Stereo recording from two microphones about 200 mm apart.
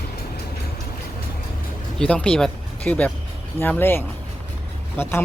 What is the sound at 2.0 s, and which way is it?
Speech, 5° left (ahead or behind).